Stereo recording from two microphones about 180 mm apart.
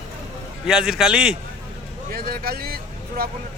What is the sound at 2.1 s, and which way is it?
Speech, 55° right (ahead or behind).